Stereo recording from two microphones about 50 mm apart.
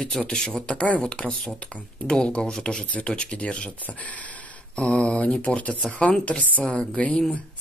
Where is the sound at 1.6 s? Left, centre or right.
Left.